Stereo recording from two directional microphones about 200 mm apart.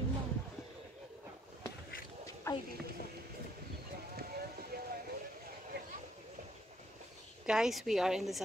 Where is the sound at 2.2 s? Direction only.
15° left (ahead or behind).